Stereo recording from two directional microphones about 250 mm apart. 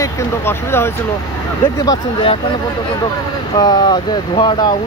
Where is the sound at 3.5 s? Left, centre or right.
Centre.